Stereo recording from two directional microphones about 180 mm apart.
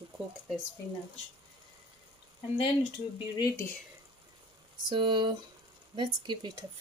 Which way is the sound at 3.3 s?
20° left (ahead or behind).